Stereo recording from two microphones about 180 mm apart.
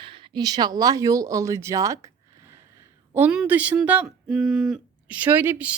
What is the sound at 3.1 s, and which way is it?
A woman's voice, 5° right (ahead or behind).